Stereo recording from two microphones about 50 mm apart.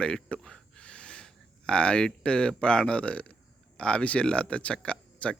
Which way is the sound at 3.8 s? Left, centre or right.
Left.